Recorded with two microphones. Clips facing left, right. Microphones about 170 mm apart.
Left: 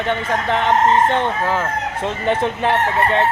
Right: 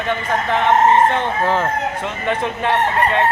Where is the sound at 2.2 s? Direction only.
30° left (ahead or behind).